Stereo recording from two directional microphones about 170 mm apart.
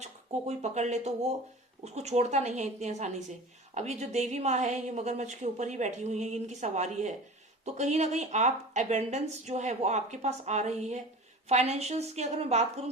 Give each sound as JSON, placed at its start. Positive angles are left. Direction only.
{"t": 0.0, "sound": "a woman's voice", "side_deg": -40}